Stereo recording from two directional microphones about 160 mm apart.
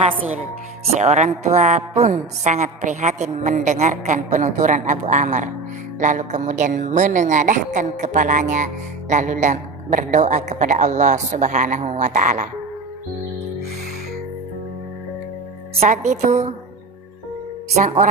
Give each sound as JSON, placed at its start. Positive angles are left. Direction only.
{"t": 0.9, "sound": "a woman's voice", "side_deg": -45}
{"t": 15.8, "sound": "a woman's voice", "side_deg": -50}
{"t": 17.7, "sound": "a woman's voice", "side_deg": -50}